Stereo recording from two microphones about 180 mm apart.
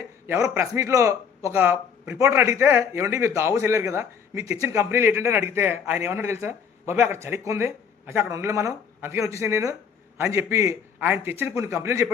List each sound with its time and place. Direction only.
0.3 s a man's voice: 15° right (ahead or behind)